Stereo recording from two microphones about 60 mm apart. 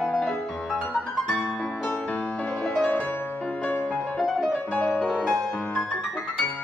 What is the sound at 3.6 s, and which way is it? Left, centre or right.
Music, left.